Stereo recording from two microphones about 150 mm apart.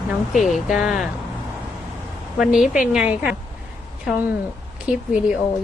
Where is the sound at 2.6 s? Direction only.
60° left (ahead or behind).